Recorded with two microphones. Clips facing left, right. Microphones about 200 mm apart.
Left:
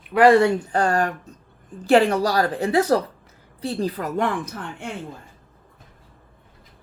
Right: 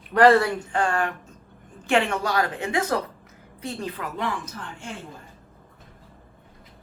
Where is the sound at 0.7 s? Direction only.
40° left (ahead or behind).